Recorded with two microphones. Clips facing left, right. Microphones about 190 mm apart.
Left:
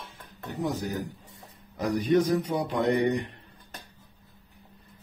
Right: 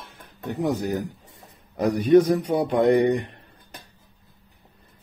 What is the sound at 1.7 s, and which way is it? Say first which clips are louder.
A man's voice: right 7 dB; 60° right (ahead or behind).